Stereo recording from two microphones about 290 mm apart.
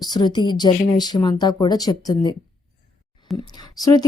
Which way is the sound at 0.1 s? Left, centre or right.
Centre.